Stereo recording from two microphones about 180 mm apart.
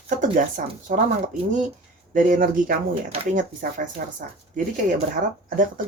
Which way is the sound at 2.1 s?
50° right (ahead or behind).